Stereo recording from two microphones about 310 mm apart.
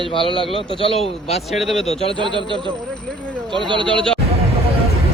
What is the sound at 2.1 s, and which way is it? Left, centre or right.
Speech, centre.